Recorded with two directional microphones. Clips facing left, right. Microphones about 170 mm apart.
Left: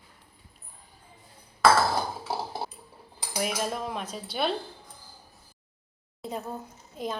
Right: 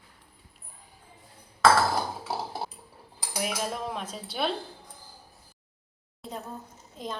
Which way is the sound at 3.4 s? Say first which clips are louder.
Left 2 dB; centre (ahead or behind).